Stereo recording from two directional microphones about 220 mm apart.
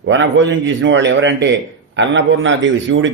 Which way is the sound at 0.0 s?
55° right (ahead or behind).